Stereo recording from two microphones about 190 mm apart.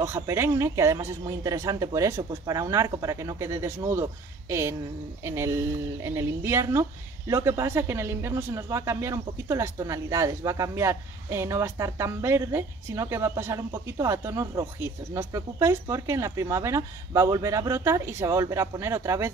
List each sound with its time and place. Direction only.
0.0 s a woman's voice: 15° right (ahead or behind)